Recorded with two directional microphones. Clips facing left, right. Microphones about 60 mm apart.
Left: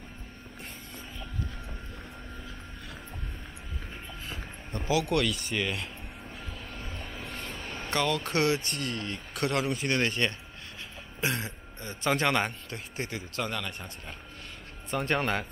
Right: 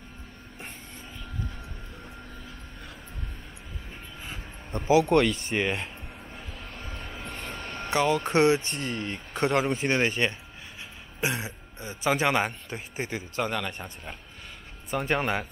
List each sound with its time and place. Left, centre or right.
4.6 s speech: right
6.8 s vehicle: centre
7.9 s speech: centre